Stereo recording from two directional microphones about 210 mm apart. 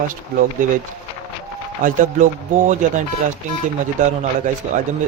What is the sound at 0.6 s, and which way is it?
Speech, 40° right (ahead or behind).